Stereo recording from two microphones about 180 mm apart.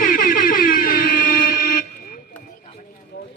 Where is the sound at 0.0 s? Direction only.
50° left (ahead or behind).